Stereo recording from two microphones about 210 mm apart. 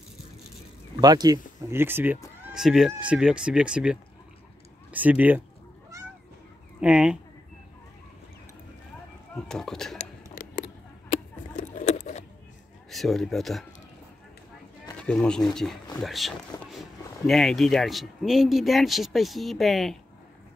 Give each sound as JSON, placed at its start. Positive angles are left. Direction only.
{"t": 1.0, "sound": "speech", "side_deg": -20}
{"t": 6.8, "sound": "speech", "side_deg": -5}
{"t": 9.3, "sound": "speech", "side_deg": 0}
{"t": 10.3, "sound": "a sound", "side_deg": 40}
{"t": 12.9, "sound": "speech", "side_deg": 0}
{"t": 15.0, "sound": "speech", "side_deg": 5}